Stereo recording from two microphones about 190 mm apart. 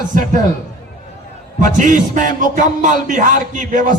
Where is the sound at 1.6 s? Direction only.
40° right (ahead or behind).